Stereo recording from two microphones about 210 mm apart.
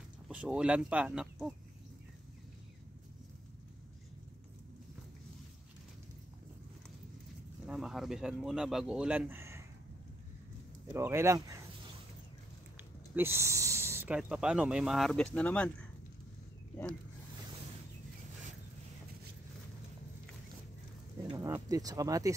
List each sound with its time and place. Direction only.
0.3 s speech: 5° right (ahead or behind)
7.6 s speech: 5° right (ahead or behind)
10.9 s speech: 10° right (ahead or behind)
12.7 s speech: 10° right (ahead or behind); by 15.9 s 5° left (ahead or behind)
21.3 s speech: 20° right (ahead or behind)